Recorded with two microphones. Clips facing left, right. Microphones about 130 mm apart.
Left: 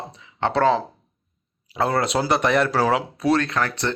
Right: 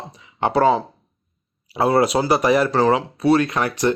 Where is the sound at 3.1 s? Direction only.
5° right (ahead or behind).